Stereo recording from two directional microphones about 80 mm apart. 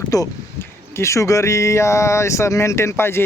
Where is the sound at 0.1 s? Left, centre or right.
Left.